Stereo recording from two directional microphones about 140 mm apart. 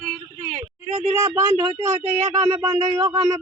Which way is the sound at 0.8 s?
40° right (ahead or behind).